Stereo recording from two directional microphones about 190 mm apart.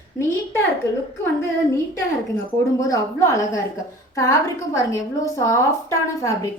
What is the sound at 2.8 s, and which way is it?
A woman's voice, 15° left (ahead or behind).